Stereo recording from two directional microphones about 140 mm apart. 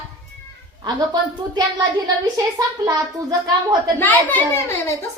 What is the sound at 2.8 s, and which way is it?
Speech, 30° right (ahead or behind).